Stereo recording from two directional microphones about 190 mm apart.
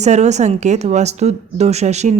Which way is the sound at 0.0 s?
35° right (ahead or behind).